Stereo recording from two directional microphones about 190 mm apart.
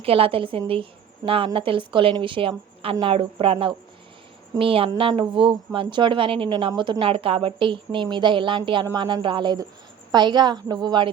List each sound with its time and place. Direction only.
0.0 s a woman's voice: 30° right (ahead or behind)